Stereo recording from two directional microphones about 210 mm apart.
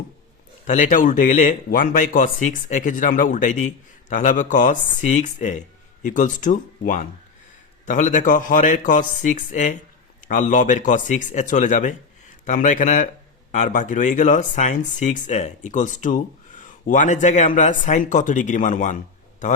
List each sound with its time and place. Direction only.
0.7 s speech: 35° left (ahead or behind)